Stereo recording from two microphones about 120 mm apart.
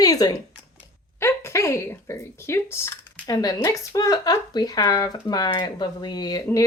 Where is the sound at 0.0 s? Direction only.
30° left (ahead or behind).